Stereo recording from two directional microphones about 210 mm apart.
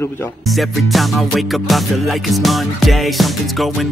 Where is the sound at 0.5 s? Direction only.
Centre (ahead or behind).